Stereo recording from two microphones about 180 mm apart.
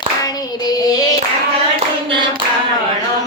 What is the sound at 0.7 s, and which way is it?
Hands, 20° left (ahead or behind).